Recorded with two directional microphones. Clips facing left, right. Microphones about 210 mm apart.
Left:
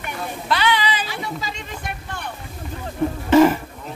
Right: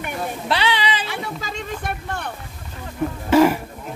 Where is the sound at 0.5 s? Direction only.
25° right (ahead or behind).